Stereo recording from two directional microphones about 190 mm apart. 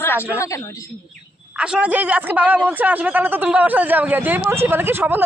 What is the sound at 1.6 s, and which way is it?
A man's voice, 5° right (ahead or behind).